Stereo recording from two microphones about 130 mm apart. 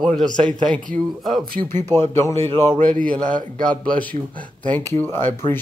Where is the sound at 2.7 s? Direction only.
85° right.